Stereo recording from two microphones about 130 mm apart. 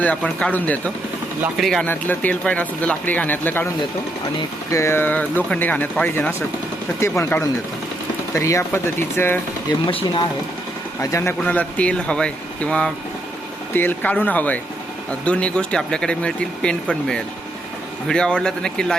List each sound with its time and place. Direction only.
0.0 s speech: 10° left (ahead or behind)
1.9 s speech: 15° left (ahead or behind)
4.7 s speech: 20° left (ahead or behind)
11.0 s speech: 20° left (ahead or behind); by 18.9 s 5° left (ahead or behind)